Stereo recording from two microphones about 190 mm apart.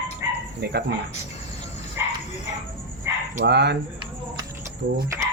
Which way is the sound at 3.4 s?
65° right (ahead or behind).